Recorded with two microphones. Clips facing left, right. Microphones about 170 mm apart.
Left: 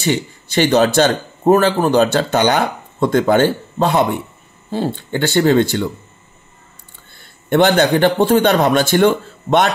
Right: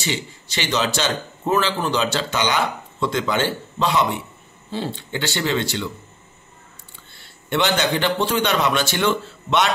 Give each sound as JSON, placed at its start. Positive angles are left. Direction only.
{"t": 0.0, "sound": "speech", "side_deg": 50}
{"t": 7.2, "sound": "a man's voice", "side_deg": 50}